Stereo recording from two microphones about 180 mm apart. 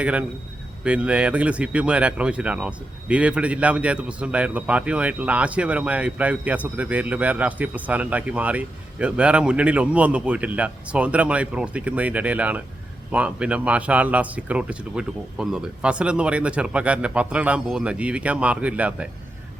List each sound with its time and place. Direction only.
0.0 s speech: 5° right (ahead or behind)